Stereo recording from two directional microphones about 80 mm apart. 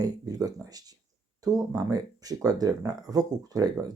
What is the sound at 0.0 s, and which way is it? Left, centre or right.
Speech, right.